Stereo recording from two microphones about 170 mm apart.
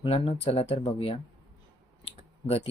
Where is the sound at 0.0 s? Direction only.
35° left (ahead or behind).